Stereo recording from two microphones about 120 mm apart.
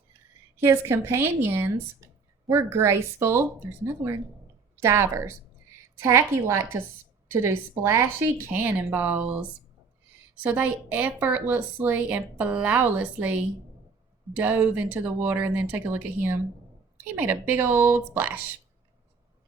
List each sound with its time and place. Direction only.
0.5 s a woman's voice: 20° right (ahead or behind)